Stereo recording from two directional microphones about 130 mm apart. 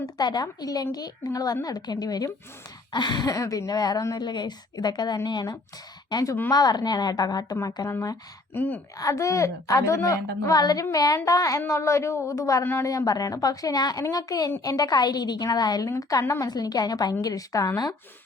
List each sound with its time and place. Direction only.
0.0 s a woman's voice: 30° left (ahead or behind)
8.5 s a woman's voice: 15° left (ahead or behind)
9.0 s a woman's voice: 25° left (ahead or behind)